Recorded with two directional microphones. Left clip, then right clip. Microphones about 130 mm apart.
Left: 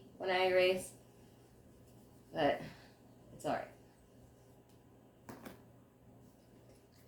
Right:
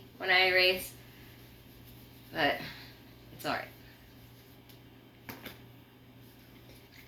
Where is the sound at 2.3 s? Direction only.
30° left (ahead or behind).